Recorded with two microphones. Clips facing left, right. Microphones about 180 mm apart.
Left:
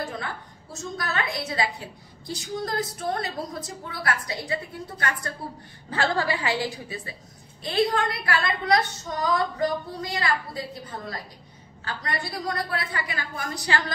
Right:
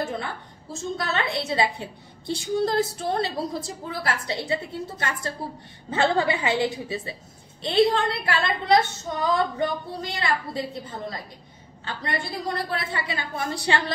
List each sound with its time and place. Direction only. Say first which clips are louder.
0.0 s a woman's voice: right 3 dB; 25° right (ahead or behind)